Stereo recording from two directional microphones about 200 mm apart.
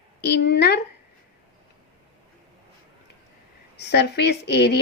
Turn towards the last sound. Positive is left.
turn(degrees=55)  # may be behind; listen again after turning